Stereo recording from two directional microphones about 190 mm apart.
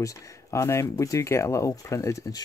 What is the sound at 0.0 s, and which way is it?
Speech, 15° left (ahead or behind).